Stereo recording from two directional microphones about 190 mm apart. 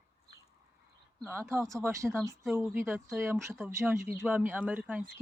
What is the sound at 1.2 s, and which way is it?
Speech, 15° right (ahead or behind).